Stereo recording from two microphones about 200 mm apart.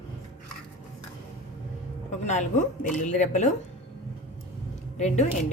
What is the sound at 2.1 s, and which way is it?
A woman's voice, 35° left (ahead or behind).